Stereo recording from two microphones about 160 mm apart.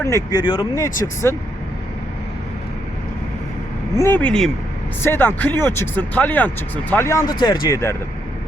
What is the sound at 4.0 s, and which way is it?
Speech, 10° left (ahead or behind).